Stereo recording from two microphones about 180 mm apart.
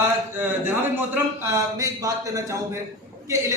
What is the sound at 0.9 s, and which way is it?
A man's voice, 10° right (ahead or behind).